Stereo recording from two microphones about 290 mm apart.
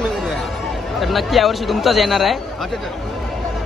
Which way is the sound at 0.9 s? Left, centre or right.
Centre.